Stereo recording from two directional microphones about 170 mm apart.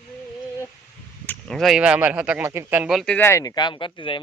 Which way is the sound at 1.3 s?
5° left (ahead or behind).